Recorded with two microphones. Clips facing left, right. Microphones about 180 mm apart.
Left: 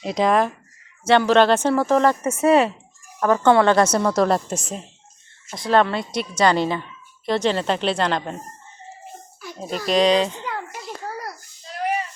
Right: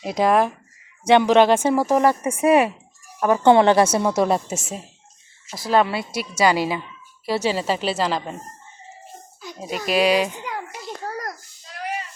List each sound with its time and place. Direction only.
0.0 s a woman's voice: 5° right (ahead or behind)
9.9 s a child's voice: 10° right (ahead or behind)